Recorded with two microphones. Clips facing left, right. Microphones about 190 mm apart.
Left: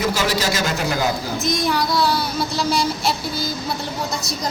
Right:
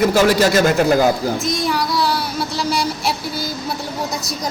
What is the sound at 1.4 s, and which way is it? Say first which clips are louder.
Speech: even; 30° right (ahead or behind).